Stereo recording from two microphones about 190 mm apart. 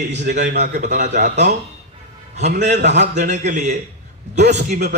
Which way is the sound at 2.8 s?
60° right (ahead or behind).